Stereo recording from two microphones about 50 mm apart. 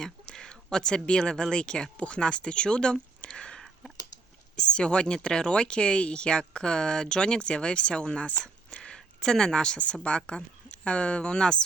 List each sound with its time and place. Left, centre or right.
0.0 s speech: centre
3.2 s a sound: centre
4.5 s speech: centre